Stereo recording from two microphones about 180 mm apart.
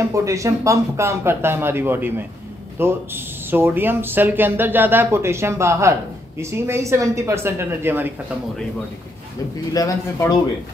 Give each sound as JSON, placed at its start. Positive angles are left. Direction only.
{"t": 0.1, "sound": "speech", "side_deg": -15}
{"t": 9.8, "sound": "a man's voice", "side_deg": 20}